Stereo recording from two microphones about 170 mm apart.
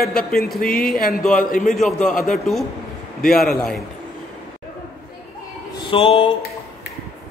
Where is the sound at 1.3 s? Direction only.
50° left (ahead or behind).